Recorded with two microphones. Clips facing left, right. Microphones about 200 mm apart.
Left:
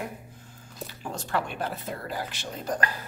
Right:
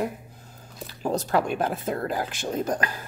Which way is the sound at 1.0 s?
40° right (ahead or behind).